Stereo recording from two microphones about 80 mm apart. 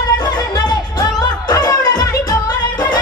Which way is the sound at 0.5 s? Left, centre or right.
Left.